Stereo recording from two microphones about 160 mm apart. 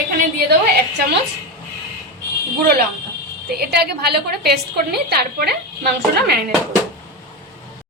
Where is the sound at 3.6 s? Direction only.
85° right.